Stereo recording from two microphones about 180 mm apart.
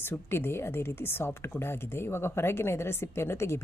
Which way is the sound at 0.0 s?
15° left (ahead or behind).